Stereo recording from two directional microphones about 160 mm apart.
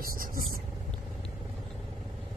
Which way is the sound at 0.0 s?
60° right (ahead or behind).